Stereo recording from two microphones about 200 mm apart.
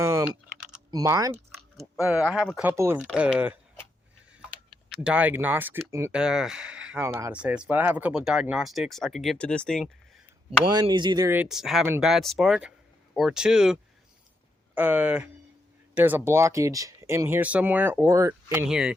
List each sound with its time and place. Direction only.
0.0 s typing: 15° right (ahead or behind)
0.9 s speech: 15° right (ahead or behind)
1.8 s speech: 5° right (ahead or behind)
5.0 s speech: 10° right (ahead or behind)
10.6 s speech: 25° right (ahead or behind); by 13.7 s 5° right (ahead or behind)
14.8 s speech: 10° right (ahead or behind)